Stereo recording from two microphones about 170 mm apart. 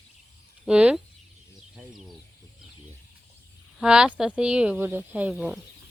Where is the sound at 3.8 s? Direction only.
5° right (ahead or behind).